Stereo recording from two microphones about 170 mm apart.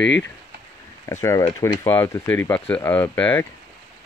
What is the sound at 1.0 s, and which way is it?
Speech, 20° left (ahead or behind).